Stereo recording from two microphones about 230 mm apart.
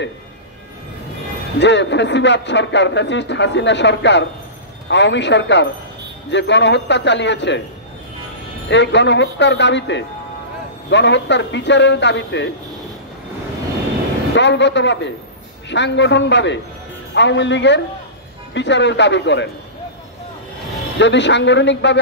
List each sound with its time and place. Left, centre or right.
1.6 s speech: left
8.6 s speech: left
14.3 s speech: left
21.0 s speech: left